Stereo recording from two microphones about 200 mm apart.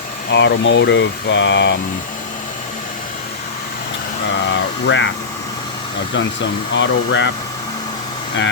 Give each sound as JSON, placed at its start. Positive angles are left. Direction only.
{"t": 0.3, "sound": "speech", "side_deg": 60}
{"t": 4.4, "sound": "speech", "side_deg": 65}
{"t": 6.7, "sound": "speech", "side_deg": 65}